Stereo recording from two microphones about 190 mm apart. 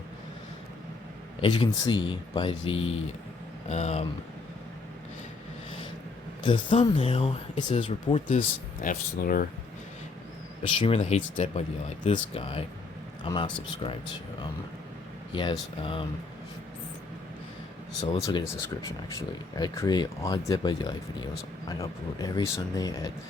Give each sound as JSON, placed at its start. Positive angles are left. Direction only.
{"t": 1.4, "sound": "speech", "side_deg": 25}
{"t": 6.4, "sound": "speech", "side_deg": 25}
{"t": 8.8, "sound": "speech", "side_deg": 45}
{"t": 10.8, "sound": "speech", "side_deg": 30}
{"t": 15.3, "sound": "speech", "side_deg": 25}
{"t": 18.0, "sound": "speech", "side_deg": 25}
{"t": 18.4, "sound": "speech", "side_deg": 15}